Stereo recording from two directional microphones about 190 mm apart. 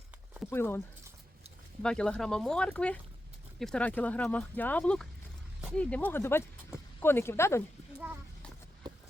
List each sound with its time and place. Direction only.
0.5 s speech: 10° left (ahead or behind)
1.8 s speech: 5° left (ahead or behind)